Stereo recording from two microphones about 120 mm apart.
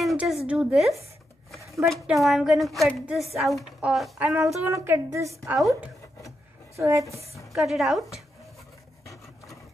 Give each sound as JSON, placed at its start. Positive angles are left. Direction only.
{"t": 0.0, "sound": "a sound", "side_deg": 0}
{"t": 0.5, "sound": "a woman's voice", "side_deg": -5}
{"t": 4.5, "sound": "a woman's voice", "side_deg": -25}
{"t": 6.8, "sound": "a woman's voice", "side_deg": -25}
{"t": 7.3, "sound": "a woman's voice", "side_deg": 0}